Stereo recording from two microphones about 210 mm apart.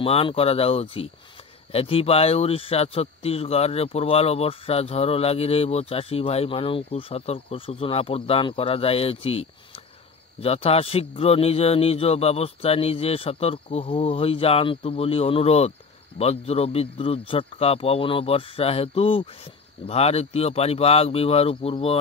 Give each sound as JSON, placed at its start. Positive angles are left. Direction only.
{"t": 0.0, "sound": "speech", "side_deg": 25}